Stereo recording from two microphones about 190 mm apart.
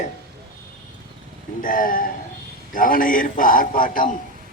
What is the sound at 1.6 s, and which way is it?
A man's voice, 45° left (ahead or behind).